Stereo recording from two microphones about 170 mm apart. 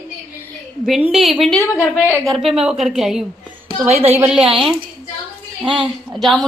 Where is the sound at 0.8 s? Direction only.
Centre (ahead or behind).